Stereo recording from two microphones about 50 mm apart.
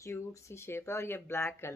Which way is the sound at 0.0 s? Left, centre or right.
Left.